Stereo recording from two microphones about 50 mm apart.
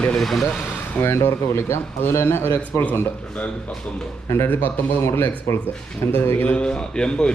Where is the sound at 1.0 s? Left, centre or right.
Left.